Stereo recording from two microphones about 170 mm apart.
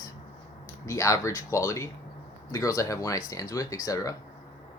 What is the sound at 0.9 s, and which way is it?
Speech, 20° left (ahead or behind).